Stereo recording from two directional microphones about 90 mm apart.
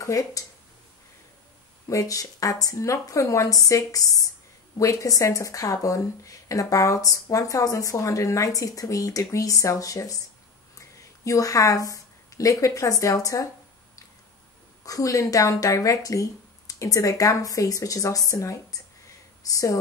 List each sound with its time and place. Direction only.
0.0 s speech: 40° left (ahead or behind)
1.9 s speech: 40° left (ahead or behind)
14.9 s speech: 40° left (ahead or behind)